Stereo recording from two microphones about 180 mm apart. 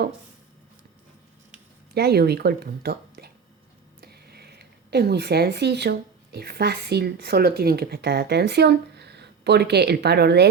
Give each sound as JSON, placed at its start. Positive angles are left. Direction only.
{"t": 1.9, "sound": "speech", "side_deg": -60}